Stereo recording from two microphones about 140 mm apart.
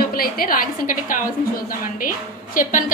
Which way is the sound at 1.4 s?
85° left.